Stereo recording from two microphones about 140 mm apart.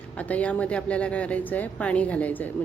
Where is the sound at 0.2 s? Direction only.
10° left (ahead or behind).